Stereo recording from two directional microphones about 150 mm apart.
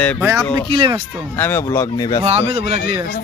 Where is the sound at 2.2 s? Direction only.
45° right (ahead or behind).